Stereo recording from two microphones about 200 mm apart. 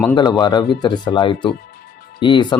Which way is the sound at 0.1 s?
20° left (ahead or behind).